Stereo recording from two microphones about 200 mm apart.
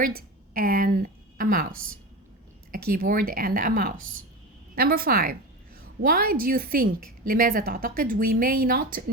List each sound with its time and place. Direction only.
0.0 s a woman's voice: 45° right (ahead or behind)